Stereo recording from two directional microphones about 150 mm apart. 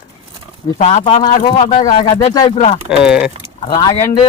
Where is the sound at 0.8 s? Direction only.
50° left (ahead or behind).